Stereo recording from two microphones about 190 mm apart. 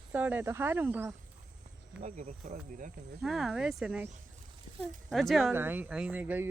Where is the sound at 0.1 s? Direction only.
10° right (ahead or behind).